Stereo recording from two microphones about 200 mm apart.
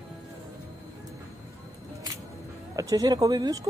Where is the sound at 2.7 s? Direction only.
15° right (ahead or behind).